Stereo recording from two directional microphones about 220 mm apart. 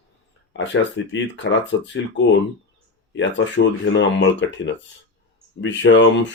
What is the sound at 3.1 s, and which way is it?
Speech, 55° left (ahead or behind).